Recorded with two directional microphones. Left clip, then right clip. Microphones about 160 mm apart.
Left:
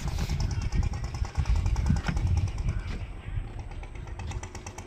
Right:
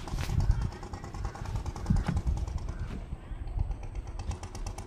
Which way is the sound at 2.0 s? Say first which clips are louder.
Left 3 dB; 10° right (ahead or behind).